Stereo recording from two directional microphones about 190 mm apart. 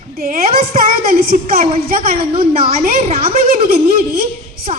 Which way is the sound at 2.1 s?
30° right (ahead or behind).